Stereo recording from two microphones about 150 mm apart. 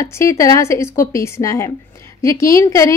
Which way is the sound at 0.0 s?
20° left (ahead or behind).